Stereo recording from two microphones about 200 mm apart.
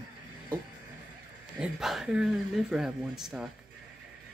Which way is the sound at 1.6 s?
Centre (ahead or behind).